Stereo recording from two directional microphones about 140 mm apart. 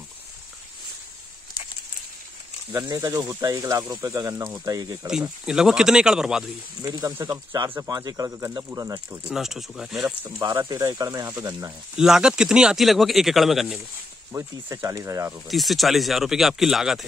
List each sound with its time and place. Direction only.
2.8 s speech: 25° right (ahead or behind)
5.4 s speech: 5° right (ahead or behind)
6.8 s speech: 25° right (ahead or behind)
9.3 s speech: 5° right (ahead or behind)
10.4 s speech: 25° right (ahead or behind)
12.0 s speech: 5° right (ahead or behind)
14.3 s speech: 20° right (ahead or behind)
15.3 s speech: centre (ahead or behind)